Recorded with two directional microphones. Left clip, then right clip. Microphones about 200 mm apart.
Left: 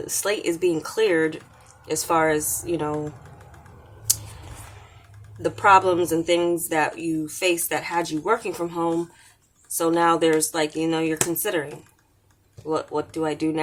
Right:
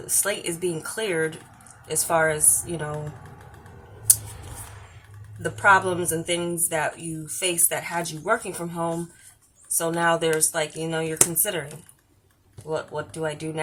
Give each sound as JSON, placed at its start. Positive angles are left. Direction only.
{"t": 0.0, "sound": "speech", "side_deg": 35}
{"t": 5.4, "sound": "speech", "side_deg": 35}
{"t": 12.6, "sound": "speech", "side_deg": 40}